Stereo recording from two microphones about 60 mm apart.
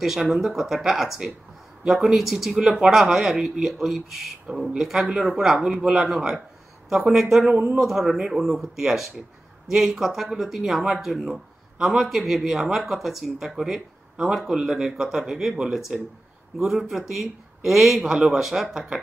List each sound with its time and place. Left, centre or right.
0.0 s speech: centre
7.5 s speech: centre
7.8 s a man's voice: centre